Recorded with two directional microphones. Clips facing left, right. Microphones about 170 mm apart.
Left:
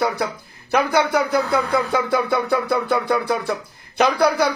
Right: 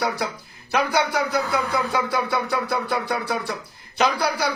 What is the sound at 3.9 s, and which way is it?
Speech, 55° left (ahead or behind).